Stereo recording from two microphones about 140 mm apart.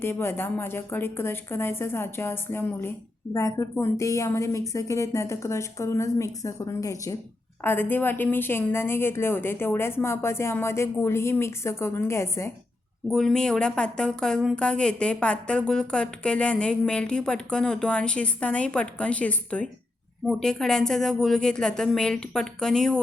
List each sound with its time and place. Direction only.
0.0 s a woman's voice: 15° left (ahead or behind)
13.1 s a woman's voice: 5° left (ahead or behind)